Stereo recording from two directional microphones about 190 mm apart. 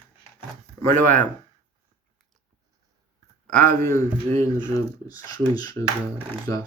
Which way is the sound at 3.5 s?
10° left (ahead or behind).